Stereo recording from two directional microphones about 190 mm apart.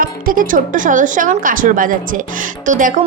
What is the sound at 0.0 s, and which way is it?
A woman's voice, 45° right (ahead or behind).